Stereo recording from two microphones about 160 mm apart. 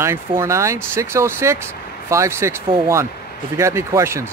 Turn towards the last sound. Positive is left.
turn(degrees=-15)  # may be behind; listen again after turning